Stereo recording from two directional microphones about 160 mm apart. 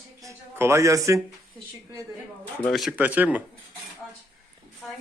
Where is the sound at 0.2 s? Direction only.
15° right (ahead or behind).